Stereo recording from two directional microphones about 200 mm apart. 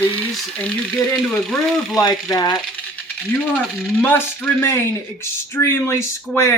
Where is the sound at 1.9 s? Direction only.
20° left (ahead or behind).